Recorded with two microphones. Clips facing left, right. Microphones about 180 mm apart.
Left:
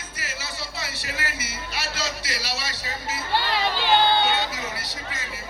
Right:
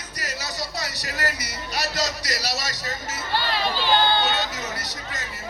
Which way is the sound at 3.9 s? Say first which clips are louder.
Left 1 dB; 20° left (ahead or behind).